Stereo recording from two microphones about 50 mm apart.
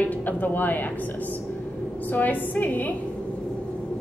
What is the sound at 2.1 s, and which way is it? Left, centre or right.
Speech, left.